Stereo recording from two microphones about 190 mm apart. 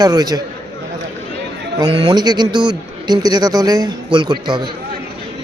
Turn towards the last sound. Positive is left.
turn(degrees=-25)  # may be behind; listen again after turning